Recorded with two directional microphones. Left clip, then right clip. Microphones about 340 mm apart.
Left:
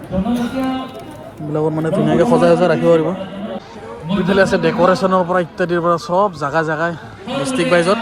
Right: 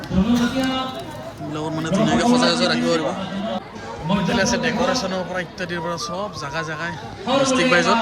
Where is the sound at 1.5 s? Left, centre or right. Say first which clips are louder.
Left 9 dB; left.